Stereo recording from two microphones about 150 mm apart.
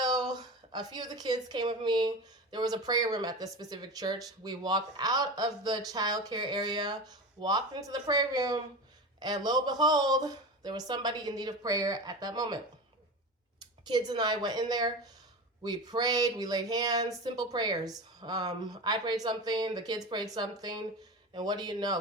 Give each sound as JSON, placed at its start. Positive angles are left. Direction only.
{"t": 0.0, "sound": "a woman's voice", "side_deg": -25}
{"t": 13.8, "sound": "a woman's voice", "side_deg": -30}